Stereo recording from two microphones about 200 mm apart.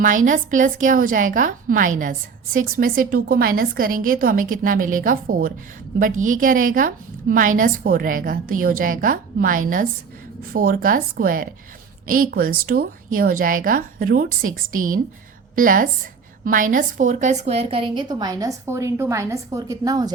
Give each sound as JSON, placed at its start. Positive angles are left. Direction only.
{"t": 0.0, "sound": "a woman's voice", "side_deg": -40}